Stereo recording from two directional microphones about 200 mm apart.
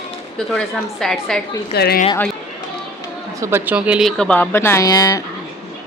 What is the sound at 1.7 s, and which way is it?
Speech, 55° left (ahead or behind).